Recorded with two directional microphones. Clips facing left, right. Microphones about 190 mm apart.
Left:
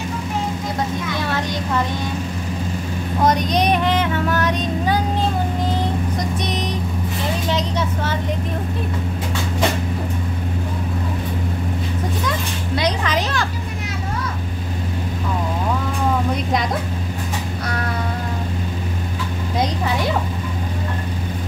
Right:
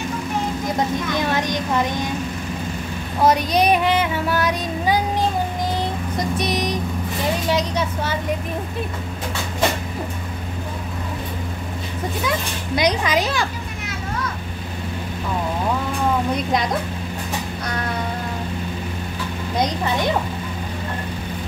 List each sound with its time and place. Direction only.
1.1 s child singing: 15° right (ahead or behind)
3.2 s child singing: 5° right (ahead or behind)
6.1 s vehicle: 5° right (ahead or behind)
7.4 s child singing: 10° right (ahead or behind)
12.3 s child singing: 15° right (ahead or behind)
19.6 s a woman's voice: 5° left (ahead or behind)